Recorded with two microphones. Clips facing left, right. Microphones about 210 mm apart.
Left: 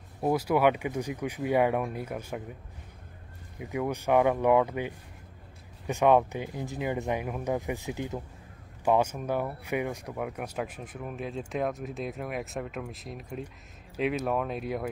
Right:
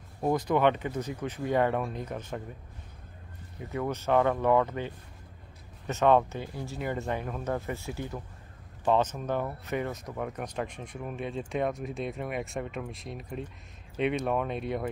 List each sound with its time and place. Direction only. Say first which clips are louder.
0.2 s speech: left 1 dB; 5° left (ahead or behind)
3.5 s speech: left 1 dB; 15° left (ahead or behind)